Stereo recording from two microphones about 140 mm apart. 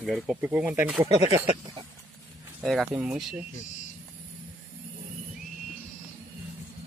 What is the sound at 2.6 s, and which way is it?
Speech, centre (ahead or behind).